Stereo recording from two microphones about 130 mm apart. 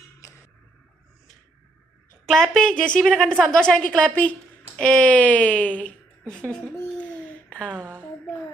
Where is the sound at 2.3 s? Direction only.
5° left (ahead or behind).